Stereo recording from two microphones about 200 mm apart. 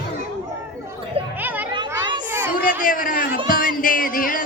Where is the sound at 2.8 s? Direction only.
45° left (ahead or behind).